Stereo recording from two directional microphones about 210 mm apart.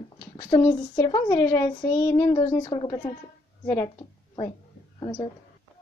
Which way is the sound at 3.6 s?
10° left (ahead or behind).